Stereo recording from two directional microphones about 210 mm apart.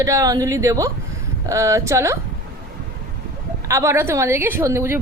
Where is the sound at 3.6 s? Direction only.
15° right (ahead or behind).